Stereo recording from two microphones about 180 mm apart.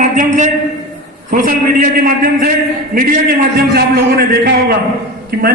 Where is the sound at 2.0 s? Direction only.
50° right (ahead or behind).